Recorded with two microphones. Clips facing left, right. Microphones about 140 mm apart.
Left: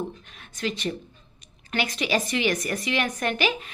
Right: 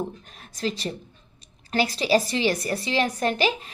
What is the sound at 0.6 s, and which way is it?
A woman's voice, 35° right (ahead or behind).